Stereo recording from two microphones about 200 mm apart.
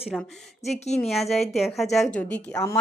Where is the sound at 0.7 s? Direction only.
35° left (ahead or behind).